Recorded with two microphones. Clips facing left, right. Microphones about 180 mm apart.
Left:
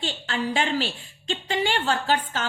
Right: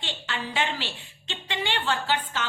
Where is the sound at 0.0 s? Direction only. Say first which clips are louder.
Left 6 dB; 40° left (ahead or behind).